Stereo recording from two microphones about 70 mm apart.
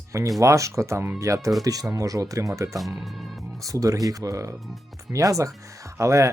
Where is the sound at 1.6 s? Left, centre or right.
Right.